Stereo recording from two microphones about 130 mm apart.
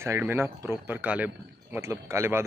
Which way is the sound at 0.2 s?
15° right (ahead or behind).